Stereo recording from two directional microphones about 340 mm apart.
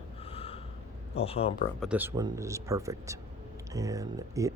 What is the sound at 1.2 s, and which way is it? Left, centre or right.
Speech, centre.